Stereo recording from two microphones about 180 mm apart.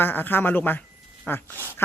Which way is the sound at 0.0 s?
10° left (ahead or behind).